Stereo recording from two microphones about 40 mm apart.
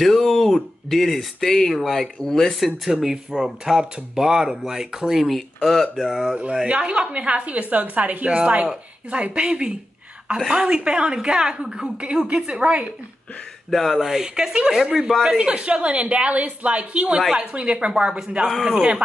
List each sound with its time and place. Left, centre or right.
0.0 s a sound: centre
0.8 s speech: centre
2.2 s speech: centre
2.5 s speech: centre
5.6 s speech: centre
6.0 s speech: centre
6.7 s a woman's voice: right
8.3 s a woman's voice: right
13.7 s speech: centre
13.9 s speech: centre
15.2 s a woman's voice: right
17.3 s a woman's voice: centre
18.5 s speech: centre